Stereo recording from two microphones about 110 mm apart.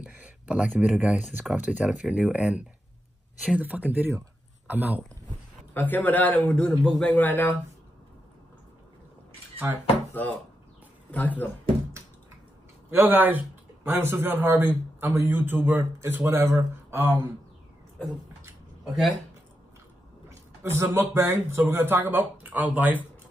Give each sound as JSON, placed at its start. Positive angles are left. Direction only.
{"t": 0.0, "sound": "a sound", "side_deg": -10}
{"t": 0.7, "sound": "speech", "side_deg": -10}
{"t": 5.8, "sound": "a man's voice", "side_deg": 15}
{"t": 11.1, "sound": "speech", "side_deg": 15}
{"t": 12.9, "sound": "a man's voice", "side_deg": -15}
{"t": 18.9, "sound": "speech", "side_deg": 0}
{"t": 20.2, "sound": "a man's voice", "side_deg": -25}